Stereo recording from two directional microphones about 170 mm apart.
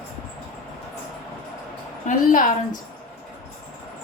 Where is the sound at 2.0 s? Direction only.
50° left (ahead or behind).